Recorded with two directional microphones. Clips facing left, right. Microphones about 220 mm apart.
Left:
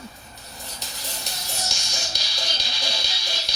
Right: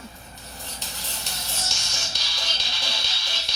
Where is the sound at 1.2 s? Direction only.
35° left (ahead or behind).